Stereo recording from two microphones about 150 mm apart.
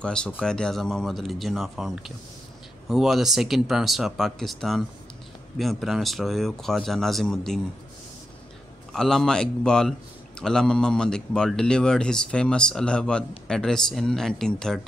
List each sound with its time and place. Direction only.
0.0 s speech: 5° left (ahead or behind)
8.9 s speech: 5° left (ahead or behind)